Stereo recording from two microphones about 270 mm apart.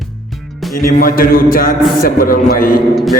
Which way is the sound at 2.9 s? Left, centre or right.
Centre.